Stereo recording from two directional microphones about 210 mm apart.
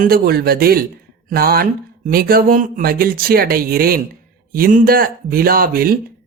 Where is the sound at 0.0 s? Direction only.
45° right (ahead or behind).